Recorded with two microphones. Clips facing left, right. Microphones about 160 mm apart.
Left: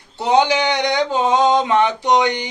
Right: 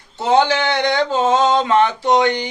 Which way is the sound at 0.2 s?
15° left (ahead or behind).